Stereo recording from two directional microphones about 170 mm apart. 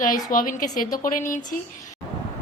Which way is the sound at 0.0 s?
55° left (ahead or behind).